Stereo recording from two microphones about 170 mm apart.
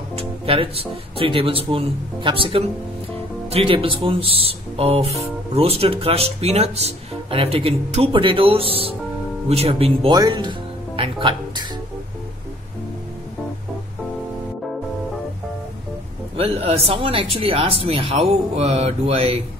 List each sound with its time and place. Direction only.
0.1 s speech: 35° right (ahead or behind)
11.0 s music: 30° right (ahead or behind)
16.3 s speech: 35° right (ahead or behind)